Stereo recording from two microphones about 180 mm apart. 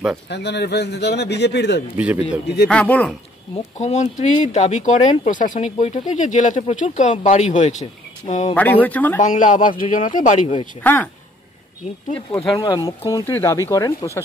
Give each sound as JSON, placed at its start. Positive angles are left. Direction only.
{"t": 0.3, "sound": "speech", "side_deg": 70}
{"t": 2.0, "sound": "speech", "side_deg": -10}
{"t": 2.7, "sound": "speech", "side_deg": 5}
{"t": 3.8, "sound": "speech", "side_deg": 40}
{"t": 8.5, "sound": "speech", "side_deg": 10}
{"t": 9.2, "sound": "a man's voice", "side_deg": 45}
{"t": 10.8, "sound": "speech", "side_deg": 10}
{"t": 12.5, "sound": "speech", "side_deg": 20}